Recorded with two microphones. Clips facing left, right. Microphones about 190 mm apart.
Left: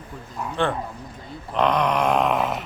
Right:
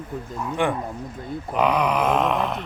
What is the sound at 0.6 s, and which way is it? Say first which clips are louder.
Speech: even; 15° right (ahead or behind).